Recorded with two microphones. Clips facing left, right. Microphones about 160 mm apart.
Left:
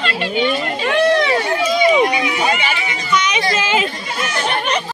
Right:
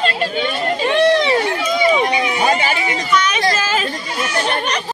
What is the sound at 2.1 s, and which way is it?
Speech, 35° right (ahead or behind).